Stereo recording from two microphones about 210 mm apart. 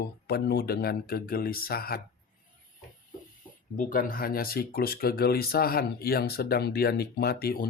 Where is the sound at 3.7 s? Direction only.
40° left (ahead or behind).